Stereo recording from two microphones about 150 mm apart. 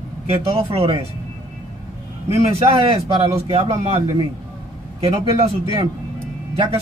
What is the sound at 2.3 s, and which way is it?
Speech, 40° right (ahead or behind).